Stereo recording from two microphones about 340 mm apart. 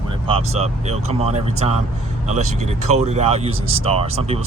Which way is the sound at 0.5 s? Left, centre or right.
Centre.